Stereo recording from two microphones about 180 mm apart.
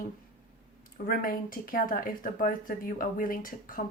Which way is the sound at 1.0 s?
50° left (ahead or behind).